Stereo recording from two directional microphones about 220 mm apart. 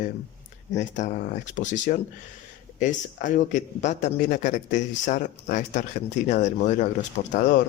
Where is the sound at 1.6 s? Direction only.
35° left (ahead or behind).